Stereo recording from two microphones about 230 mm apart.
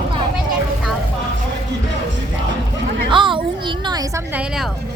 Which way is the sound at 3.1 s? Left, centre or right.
Right.